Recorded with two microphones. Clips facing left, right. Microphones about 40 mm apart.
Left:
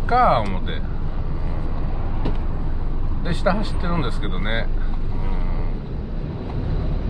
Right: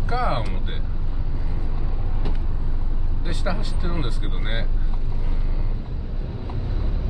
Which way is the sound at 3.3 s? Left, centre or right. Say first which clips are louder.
Left 7 dB; left.